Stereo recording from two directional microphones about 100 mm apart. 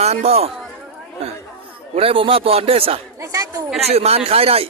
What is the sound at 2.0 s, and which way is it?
A man's voice, 65° right (ahead or behind).